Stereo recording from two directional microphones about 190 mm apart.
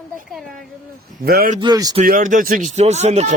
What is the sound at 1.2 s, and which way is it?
Speech, 55° right (ahead or behind).